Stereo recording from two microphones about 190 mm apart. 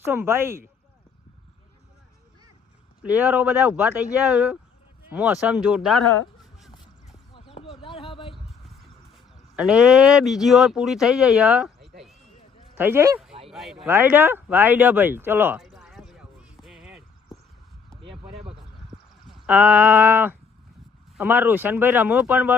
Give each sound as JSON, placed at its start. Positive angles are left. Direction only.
{"t": 0.0, "sound": "speech", "side_deg": -10}
{"t": 3.0, "sound": "speech", "side_deg": -5}
{"t": 6.4, "sound": "a sound", "side_deg": 0}
{"t": 7.3, "sound": "a sound", "side_deg": 30}
{"t": 9.1, "sound": "speech", "side_deg": 0}
{"t": 12.7, "sound": "speech", "side_deg": -10}
{"t": 13.5, "sound": "speech", "side_deg": 0}
{"t": 15.6, "sound": "a sound", "side_deg": 0}
{"t": 19.5, "sound": "speech", "side_deg": -10}